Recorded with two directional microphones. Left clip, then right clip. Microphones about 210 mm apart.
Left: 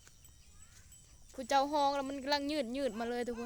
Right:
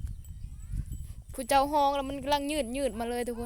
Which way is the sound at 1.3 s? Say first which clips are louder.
Right 6 dB; 45° right (ahead or behind).